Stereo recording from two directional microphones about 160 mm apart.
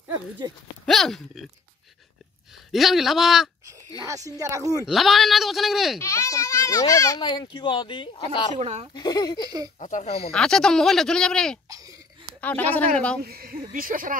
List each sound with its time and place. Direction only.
0.8 s speech: centre (ahead or behind)
2.7 s speech: centre (ahead or behind)
4.0 s a woman's voice: 20° right (ahead or behind)
4.8 s speech: centre (ahead or behind)
5.9 s speech: 20° left (ahead or behind)
8.5 s speech: 45° right (ahead or behind)
8.9 s speech: 25° left (ahead or behind)
9.8 s speech: 50° left (ahead or behind)
10.3 s speech: 5° left (ahead or behind)
13.2 s speech: 65° right (ahead or behind)